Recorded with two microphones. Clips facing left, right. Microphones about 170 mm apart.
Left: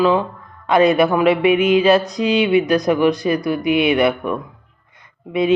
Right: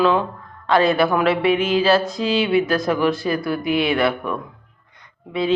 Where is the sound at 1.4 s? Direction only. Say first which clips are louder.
Left 3 dB; 35° right (ahead or behind).